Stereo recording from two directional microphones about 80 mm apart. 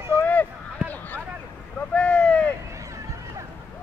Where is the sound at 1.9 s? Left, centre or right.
Centre.